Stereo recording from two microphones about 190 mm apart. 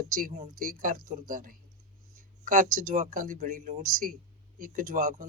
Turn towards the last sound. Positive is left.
turn(degrees=-45)  # may be behind; listen again after turning